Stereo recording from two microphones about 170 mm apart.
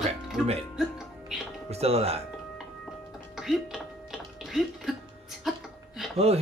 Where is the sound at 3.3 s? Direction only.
Centre (ahead or behind).